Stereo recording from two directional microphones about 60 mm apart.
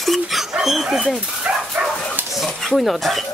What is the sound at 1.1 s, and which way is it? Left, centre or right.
Speech, centre.